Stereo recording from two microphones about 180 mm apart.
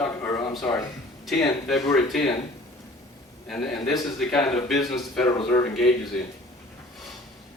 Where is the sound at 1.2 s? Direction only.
Centre (ahead or behind).